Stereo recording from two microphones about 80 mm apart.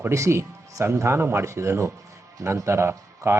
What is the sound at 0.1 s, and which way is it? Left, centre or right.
A man's voice, right.